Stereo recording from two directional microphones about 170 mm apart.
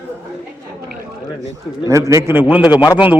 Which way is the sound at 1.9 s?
20° right (ahead or behind).